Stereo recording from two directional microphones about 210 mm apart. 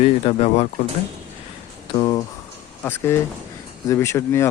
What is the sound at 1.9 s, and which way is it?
Speech, 25° left (ahead or behind).